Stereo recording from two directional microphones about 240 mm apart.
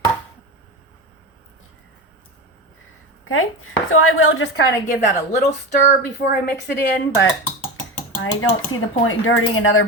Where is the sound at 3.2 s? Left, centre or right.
Left.